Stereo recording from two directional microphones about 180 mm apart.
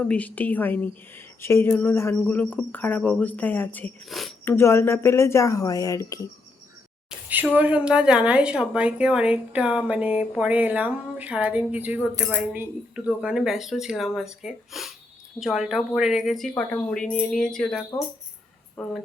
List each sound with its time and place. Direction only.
0.0 s speech: 5° left (ahead or behind)
4.4 s speech: 15° left (ahead or behind)
7.1 s a woman's voice: 5° right (ahead or behind)